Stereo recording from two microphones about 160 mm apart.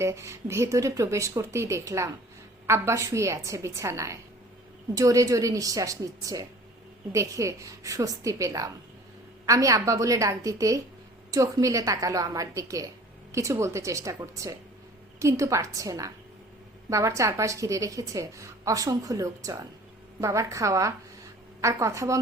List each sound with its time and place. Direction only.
0.0 s a woman's voice: 15° right (ahead or behind)